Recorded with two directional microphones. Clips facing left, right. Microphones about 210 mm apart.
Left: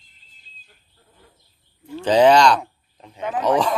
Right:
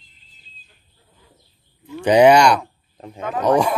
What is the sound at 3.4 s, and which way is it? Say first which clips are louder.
Speech: right 2 dB; 10° right (ahead or behind).